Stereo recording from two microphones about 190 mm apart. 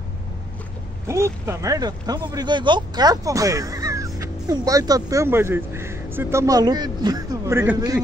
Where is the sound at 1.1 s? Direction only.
15° right (ahead or behind).